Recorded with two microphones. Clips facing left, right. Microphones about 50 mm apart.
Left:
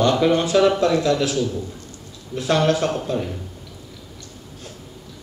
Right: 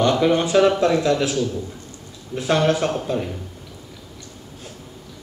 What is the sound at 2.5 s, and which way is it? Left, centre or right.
Speech, centre.